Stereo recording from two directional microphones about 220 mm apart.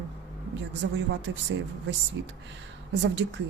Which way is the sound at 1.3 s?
55° right (ahead or behind).